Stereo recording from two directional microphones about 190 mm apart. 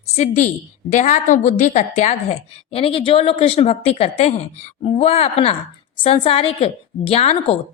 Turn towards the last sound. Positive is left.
turn(degrees=35)  # may be behind; listen again after turning